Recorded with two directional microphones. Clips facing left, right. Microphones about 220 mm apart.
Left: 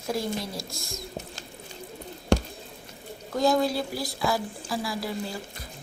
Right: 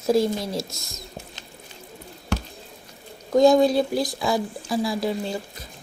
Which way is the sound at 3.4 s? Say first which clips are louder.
Right 8 dB; 20° right (ahead or behind).